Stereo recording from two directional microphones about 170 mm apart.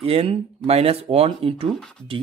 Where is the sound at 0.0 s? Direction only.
35° right (ahead or behind).